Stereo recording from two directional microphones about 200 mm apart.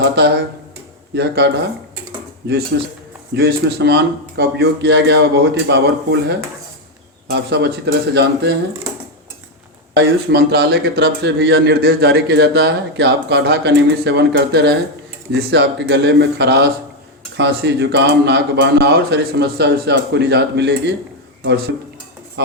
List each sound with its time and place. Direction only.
0.0 s a sound: 55° right (ahead or behind)
1.1 s speech: 60° right (ahead or behind)
2.7 s speech: 55° right (ahead or behind)
9.9 s speech: 55° right (ahead or behind)